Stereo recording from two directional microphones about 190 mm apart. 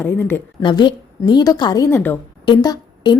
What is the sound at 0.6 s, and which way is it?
A woman's voice, 25° left (ahead or behind).